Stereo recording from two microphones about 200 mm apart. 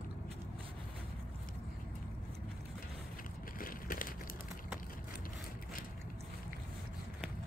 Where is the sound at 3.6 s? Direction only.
45° left (ahead or behind).